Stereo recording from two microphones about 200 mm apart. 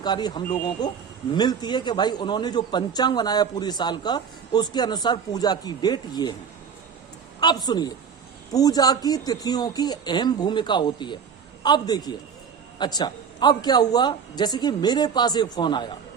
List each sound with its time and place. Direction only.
0.0 s a man's voice: 20° left (ahead or behind)
7.3 s a man's voice: 20° left (ahead or behind)